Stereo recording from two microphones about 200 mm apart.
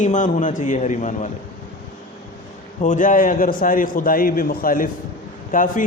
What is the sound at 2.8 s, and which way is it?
A man's voice, 40° left (ahead or behind).